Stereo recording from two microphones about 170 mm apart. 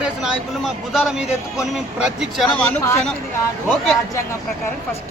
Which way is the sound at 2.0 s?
5° right (ahead or behind).